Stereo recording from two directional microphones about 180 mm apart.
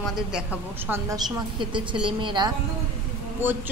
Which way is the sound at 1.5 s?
25° right (ahead or behind).